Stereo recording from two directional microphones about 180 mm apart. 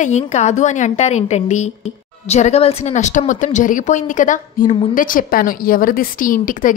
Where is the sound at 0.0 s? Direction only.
40° left (ahead or behind).